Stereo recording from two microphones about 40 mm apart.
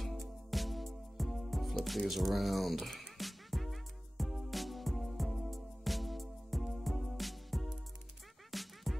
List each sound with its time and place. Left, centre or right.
0.0 s music: centre